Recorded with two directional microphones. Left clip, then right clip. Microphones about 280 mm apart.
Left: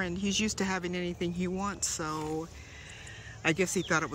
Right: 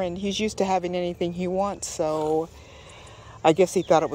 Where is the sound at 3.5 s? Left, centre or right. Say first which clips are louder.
Right 10 dB; centre.